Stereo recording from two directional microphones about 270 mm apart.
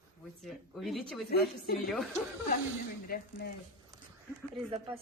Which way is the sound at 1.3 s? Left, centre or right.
Left.